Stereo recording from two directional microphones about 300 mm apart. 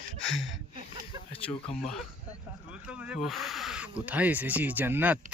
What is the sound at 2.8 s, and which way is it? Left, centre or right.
Speech, centre.